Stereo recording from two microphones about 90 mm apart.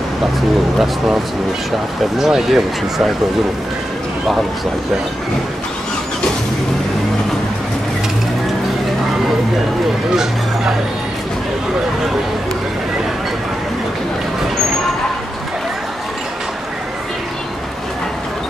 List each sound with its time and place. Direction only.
0.7 s speech: 5° right (ahead or behind)